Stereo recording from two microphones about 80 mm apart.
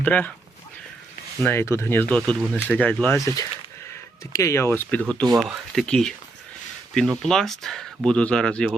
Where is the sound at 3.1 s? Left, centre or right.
Left.